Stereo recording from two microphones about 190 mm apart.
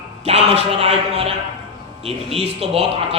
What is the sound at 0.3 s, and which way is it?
Speech, 35° right (ahead or behind).